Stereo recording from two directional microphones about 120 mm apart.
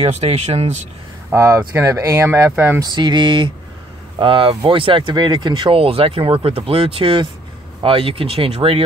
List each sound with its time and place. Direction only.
0.0 s speech: 60° right (ahead or behind)
1.3 s speech: 25° right (ahead or behind)
2.8 s speech: 35° right (ahead or behind); by 8.8 s 55° right (ahead or behind)